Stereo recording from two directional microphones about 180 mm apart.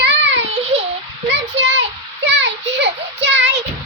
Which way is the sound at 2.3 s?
75° right (ahead or behind).